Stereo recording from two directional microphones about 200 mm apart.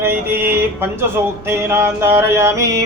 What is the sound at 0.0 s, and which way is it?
Music, 10° right (ahead or behind).